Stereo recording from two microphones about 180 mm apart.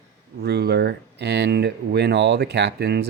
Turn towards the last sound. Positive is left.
turn(degrees=-65)  # may be behind; listen again after turning